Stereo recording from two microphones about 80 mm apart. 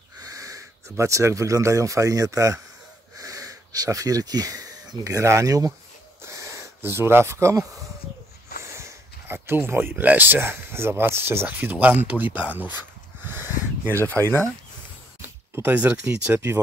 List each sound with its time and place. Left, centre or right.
0.2 s speech: right
6.2 s a sound: right
6.8 s speech: right
8.6 s speech: right; by 12.7 s centre
13.2 s a sound: right
15.2 s speech: right